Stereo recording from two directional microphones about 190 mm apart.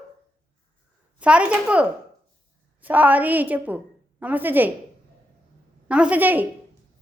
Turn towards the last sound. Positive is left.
turn(degrees=-10)  # may be behind; listen again after turning